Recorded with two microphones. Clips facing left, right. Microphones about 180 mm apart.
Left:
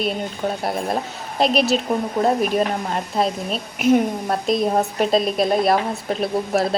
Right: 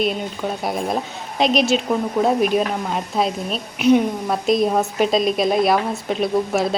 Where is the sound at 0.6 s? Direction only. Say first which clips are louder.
Even; centre (ahead or behind).